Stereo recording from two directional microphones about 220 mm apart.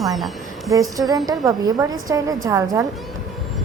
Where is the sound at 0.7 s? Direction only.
15° right (ahead or behind).